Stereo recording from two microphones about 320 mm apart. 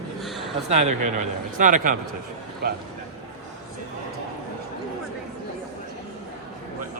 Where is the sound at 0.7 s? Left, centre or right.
Right.